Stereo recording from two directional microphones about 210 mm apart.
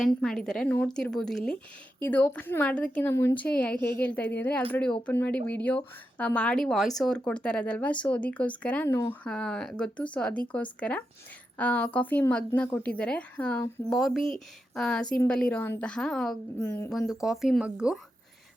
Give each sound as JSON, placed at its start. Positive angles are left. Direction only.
{"t": 0.0, "sound": "a woman's voice", "side_deg": 5}